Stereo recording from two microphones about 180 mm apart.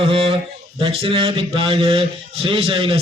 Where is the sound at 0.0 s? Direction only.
30° right (ahead or behind).